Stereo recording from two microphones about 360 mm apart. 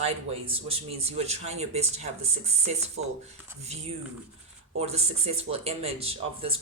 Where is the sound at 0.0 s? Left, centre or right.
Centre.